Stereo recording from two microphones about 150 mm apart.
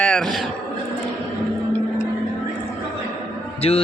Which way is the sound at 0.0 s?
5° left (ahead or behind).